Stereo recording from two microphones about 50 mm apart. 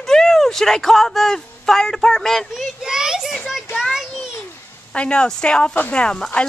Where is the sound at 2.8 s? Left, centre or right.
Centre.